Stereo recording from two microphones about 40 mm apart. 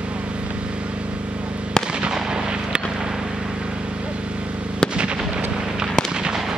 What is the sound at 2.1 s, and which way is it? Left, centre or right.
Artillery fire, right.